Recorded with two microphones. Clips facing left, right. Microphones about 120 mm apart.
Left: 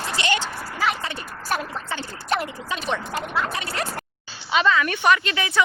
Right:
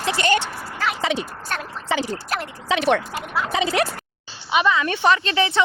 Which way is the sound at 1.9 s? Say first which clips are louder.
Right 10 dB; 90° right.